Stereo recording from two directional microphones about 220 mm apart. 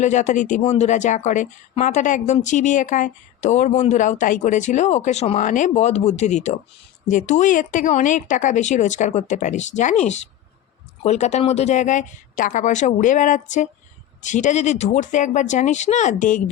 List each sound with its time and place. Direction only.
0.0 s speech: 35° left (ahead or behind)
11.0 s speech: 30° left (ahead or behind)